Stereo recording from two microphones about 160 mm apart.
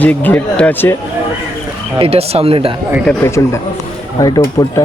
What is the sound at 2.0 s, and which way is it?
Speech, 40° right (ahead or behind).